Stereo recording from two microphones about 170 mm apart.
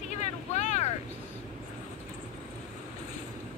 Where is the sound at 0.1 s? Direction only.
40° left (ahead or behind).